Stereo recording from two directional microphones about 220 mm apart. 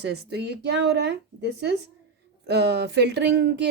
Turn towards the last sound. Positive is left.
turn(degrees=-50)  # may be behind; listen again after turning